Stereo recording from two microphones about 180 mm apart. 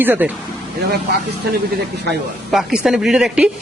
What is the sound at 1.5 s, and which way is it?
Speech, 65° right (ahead or behind).